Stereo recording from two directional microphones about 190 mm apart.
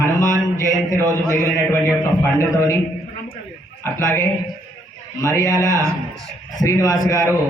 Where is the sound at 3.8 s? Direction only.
15° left (ahead or behind).